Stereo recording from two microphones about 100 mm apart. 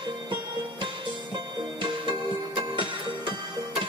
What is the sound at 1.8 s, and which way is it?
Music, 55° right (ahead or behind).